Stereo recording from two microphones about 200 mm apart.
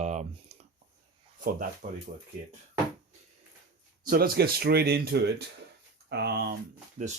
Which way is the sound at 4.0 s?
45° right (ahead or behind).